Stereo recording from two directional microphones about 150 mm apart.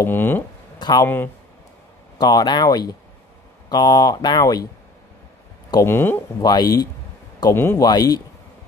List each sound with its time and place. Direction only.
0.0 s speech: 15° left (ahead or behind)
0.7 s speech: 30° left (ahead or behind)
1.0 s speech: 15° left (ahead or behind)
2.1 s speech: 30° left (ahead or behind)
5.9 s speech: 15° left (ahead or behind)
6.4 s speech: 25° left (ahead or behind)
7.8 s speech: 25° left (ahead or behind)